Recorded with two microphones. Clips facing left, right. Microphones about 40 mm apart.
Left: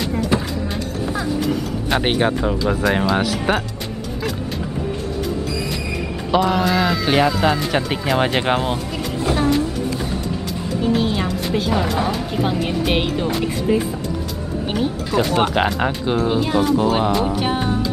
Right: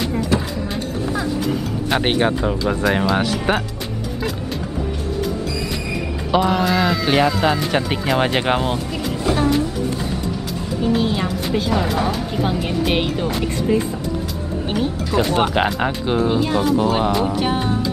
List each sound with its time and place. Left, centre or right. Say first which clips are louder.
1.9 s a woman's voice: even; centre
6.3 s a woman's voice: even; centre
9.2 s train: even; centre
10.8 s a woman's voice: even; centre